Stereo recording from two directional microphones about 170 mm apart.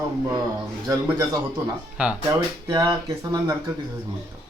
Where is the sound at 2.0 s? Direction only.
5° right (ahead or behind).